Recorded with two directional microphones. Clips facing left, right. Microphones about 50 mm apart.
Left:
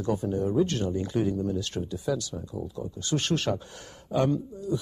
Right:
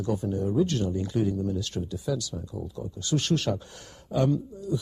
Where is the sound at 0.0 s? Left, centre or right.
Left.